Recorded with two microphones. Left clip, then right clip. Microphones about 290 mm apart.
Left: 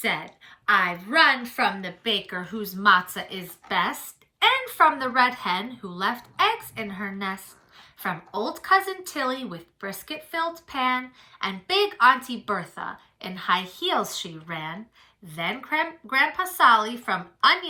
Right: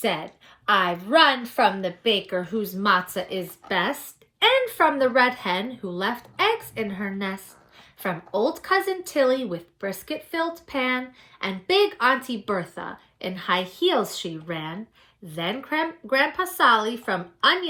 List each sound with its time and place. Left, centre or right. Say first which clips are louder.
0.7 s a woman's voice: right 2 dB; right
2.0 s a woman's voice: right 3 dB; centre
8.4 s a woman's voice: left 1 dB; centre